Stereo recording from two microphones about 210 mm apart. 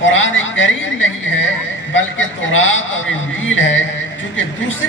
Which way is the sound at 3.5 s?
65° left (ahead or behind).